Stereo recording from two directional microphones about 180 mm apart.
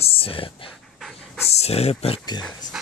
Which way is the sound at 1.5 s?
35° left (ahead or behind).